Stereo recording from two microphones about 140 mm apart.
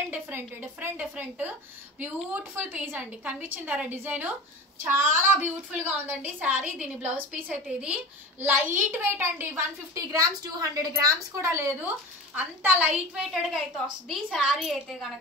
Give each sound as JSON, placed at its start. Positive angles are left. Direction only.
{"t": 0.1, "sound": "a woman's voice", "side_deg": -15}